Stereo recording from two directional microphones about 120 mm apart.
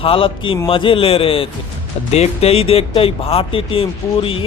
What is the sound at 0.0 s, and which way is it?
Speech, 50° left (ahead or behind).